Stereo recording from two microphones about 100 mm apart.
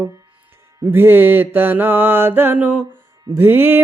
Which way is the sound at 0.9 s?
25° right (ahead or behind).